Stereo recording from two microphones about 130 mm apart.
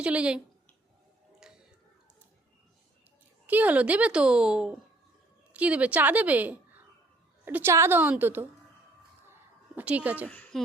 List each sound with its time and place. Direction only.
0.0 s a child's voice: 10° right (ahead or behind)
1.4 s music: 5° right (ahead or behind)
3.4 s a child's voice: 10° right (ahead or behind)
9.2 s a sound: 15° right (ahead or behind)
10.2 s a woman's voice: 15° left (ahead or behind)